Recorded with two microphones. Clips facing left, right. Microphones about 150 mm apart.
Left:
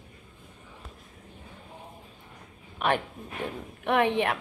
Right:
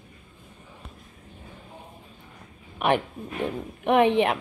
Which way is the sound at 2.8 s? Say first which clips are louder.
Right 4 dB; 15° right (ahead or behind).